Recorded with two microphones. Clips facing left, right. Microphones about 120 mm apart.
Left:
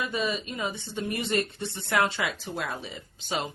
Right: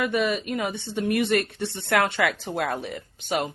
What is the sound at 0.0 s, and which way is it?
Speech, 65° right (ahead or behind).